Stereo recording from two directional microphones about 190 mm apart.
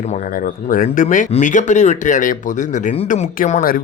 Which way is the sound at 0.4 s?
45° left (ahead or behind).